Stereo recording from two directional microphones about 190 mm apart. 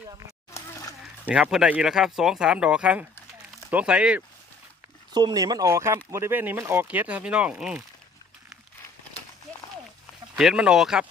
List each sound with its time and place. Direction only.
0.5 s a sound: 15° left (ahead or behind)
1.3 s speech: 5° right (ahead or behind)
5.1 s speech: 20° right (ahead or behind)
10.3 s speech: 5° right (ahead or behind)